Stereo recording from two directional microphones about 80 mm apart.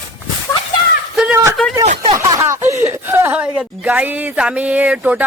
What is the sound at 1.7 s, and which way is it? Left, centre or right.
Speech, right.